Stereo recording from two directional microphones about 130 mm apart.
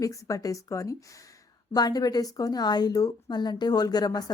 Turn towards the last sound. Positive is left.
turn(degrees=30)  # may be behind; listen again after turning